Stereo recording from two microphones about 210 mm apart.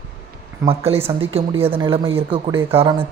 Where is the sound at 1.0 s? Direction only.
25° right (ahead or behind).